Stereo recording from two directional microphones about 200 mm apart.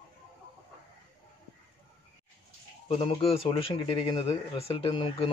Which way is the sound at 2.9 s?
25° left (ahead or behind).